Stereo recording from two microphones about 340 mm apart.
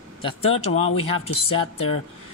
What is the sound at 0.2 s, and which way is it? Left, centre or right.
Speech, centre.